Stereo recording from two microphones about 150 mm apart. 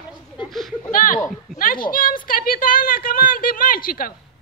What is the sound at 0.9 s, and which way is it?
Speech, 65° left (ahead or behind).